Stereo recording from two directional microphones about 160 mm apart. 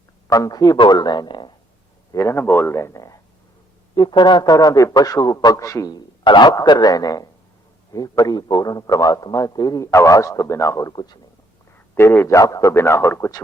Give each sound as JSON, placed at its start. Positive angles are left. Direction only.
{"t": 0.3, "sound": "a man's voice", "side_deg": 20}
{"t": 2.1, "sound": "a man's voice", "side_deg": 15}
{"t": 11.9, "sound": "a man's voice", "side_deg": 15}